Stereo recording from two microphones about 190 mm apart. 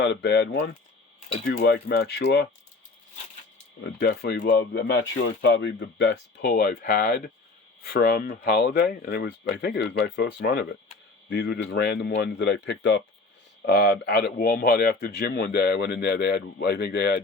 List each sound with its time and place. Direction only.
0.0 s speech: 60° left (ahead or behind)
3.8 s speech: 60° left (ahead or behind)